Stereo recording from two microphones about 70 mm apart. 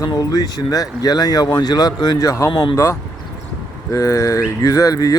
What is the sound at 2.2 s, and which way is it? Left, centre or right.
Speech, left.